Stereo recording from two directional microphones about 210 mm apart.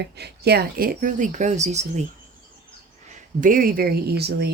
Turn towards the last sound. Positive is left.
turn(degrees=-50)  # may be behind; listen again after turning